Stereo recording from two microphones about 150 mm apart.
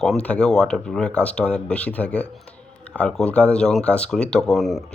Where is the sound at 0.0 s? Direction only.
5° left (ahead or behind).